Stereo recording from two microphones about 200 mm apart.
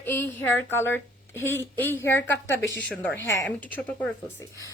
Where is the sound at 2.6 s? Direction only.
60° left (ahead or behind).